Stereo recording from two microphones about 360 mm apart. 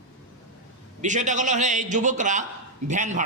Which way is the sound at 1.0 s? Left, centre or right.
Centre.